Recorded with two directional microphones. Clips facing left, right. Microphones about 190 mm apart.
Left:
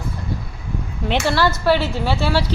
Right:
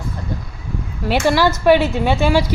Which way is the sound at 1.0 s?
10° right (ahead or behind).